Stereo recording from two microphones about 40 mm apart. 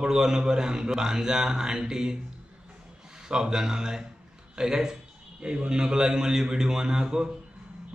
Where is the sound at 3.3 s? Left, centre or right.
Centre.